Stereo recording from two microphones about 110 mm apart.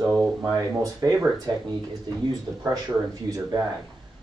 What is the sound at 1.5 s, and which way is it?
Speech, 40° right (ahead or behind).